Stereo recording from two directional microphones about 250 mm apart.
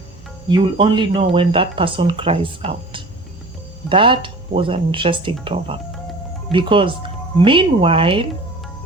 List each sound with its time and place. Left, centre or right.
0.4 s speech: centre